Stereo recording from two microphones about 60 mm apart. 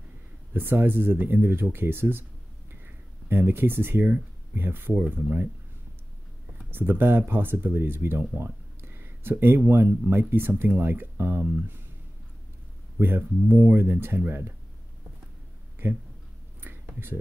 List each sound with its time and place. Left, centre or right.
0.5 s speech: right
3.3 s speech: right
6.7 s speech: right
13.0 s speech: right
15.8 s speech: right
16.6 s a sound: right